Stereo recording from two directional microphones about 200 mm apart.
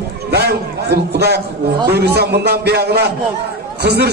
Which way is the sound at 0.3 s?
55° right (ahead or behind).